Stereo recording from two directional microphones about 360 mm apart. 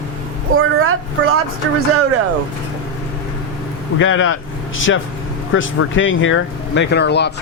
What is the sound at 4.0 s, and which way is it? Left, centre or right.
Speech, left.